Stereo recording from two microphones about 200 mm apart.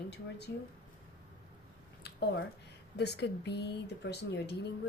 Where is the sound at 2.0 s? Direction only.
55° left (ahead or behind).